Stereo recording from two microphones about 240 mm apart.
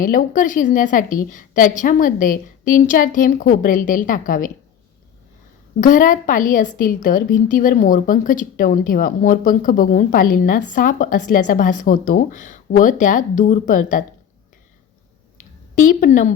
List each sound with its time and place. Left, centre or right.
0.0 s a woman's voice: left
5.8 s a woman's voice: left
15.4 s a sound: left